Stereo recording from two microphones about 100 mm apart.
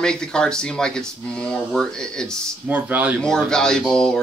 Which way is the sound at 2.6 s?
15° right (ahead or behind).